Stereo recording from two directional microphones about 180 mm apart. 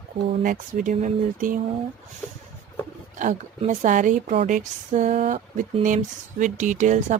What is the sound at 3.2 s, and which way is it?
A woman's voice, 45° right (ahead or behind).